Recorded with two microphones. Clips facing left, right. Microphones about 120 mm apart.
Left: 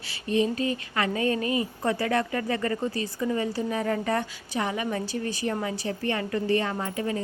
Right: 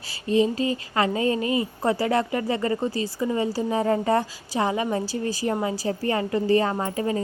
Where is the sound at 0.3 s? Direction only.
25° right (ahead or behind).